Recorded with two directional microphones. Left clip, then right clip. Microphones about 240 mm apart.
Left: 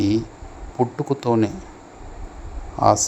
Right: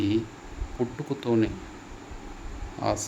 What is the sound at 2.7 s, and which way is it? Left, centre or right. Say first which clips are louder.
Speech: left 12 dB; left.